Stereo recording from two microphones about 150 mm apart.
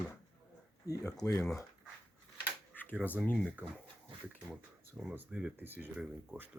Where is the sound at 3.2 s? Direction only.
10° left (ahead or behind).